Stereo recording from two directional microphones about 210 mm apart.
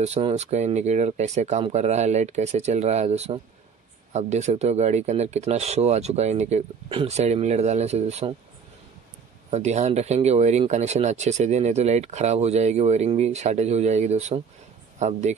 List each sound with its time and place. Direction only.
0.0 s speech: 30° right (ahead or behind)
9.5 s speech: 30° right (ahead or behind)